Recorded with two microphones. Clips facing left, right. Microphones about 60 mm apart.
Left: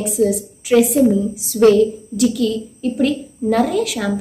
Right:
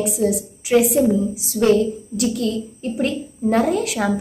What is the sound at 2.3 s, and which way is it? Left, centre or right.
Speech, right.